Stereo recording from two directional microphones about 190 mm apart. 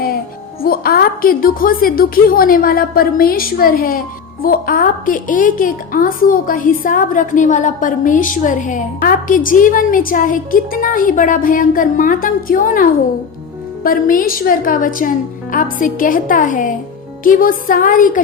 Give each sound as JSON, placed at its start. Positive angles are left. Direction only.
{"t": 0.6, "sound": "a woman's voice", "side_deg": 50}